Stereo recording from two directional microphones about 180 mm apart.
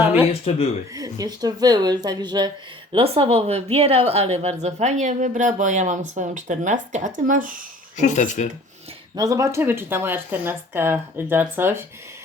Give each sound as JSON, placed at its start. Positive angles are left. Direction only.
{"t": 0.9, "sound": "speech", "side_deg": -20}
{"t": 8.0, "sound": "speech", "side_deg": 45}
{"t": 9.1, "sound": "speech", "side_deg": -20}